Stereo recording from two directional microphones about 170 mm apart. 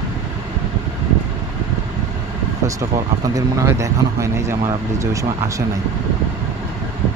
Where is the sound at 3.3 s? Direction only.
20° right (ahead or behind).